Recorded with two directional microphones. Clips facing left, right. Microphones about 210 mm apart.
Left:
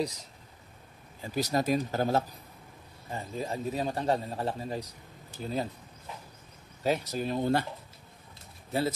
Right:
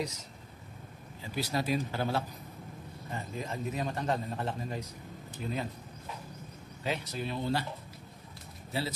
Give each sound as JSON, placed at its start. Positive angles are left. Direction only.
{"t": 1.2, "sound": "speech", "side_deg": 45}
{"t": 3.1, "sound": "a man's voice", "side_deg": 30}
{"t": 6.8, "sound": "speech", "side_deg": 40}